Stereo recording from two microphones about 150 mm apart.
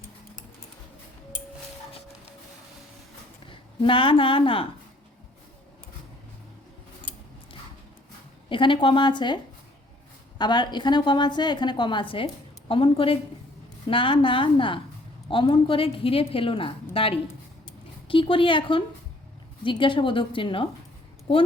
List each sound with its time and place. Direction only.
3.4 s a woman's voice: 35° left (ahead or behind)
8.4 s a woman's voice: 35° left (ahead or behind)